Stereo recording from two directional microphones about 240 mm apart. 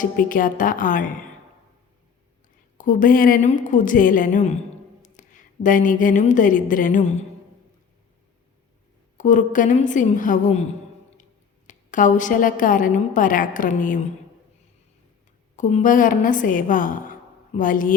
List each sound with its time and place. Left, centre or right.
0.0 s a woman's voice: left
2.7 s a woman's voice: left
9.1 s a woman's voice: left
15.5 s a woman's voice: left